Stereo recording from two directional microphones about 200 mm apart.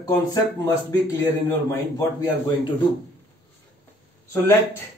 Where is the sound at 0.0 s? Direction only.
20° left (ahead or behind).